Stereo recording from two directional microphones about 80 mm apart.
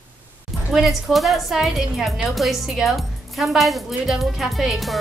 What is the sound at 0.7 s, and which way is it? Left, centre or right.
A woman's voice, centre.